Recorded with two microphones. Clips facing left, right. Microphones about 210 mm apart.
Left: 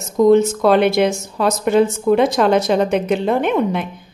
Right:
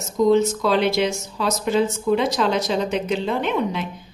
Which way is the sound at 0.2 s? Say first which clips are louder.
Left 5 dB; 55° left (ahead or behind).